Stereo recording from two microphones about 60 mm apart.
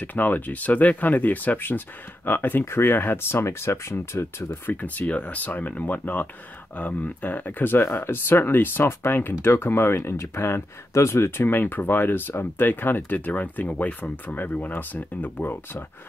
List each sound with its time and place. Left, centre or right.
0.0 s speech: left
4.6 s speech: left